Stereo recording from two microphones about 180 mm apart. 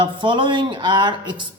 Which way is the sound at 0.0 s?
25° right (ahead or behind).